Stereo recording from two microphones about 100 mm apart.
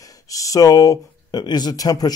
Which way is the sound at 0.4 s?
35° left (ahead or behind).